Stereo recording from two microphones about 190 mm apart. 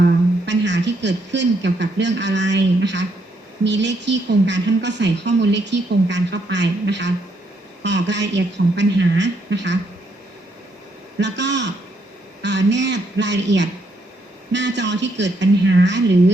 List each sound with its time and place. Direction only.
0.0 s a man's voice: 70° right (ahead or behind)
11.2 s a woman's voice: 65° right (ahead or behind)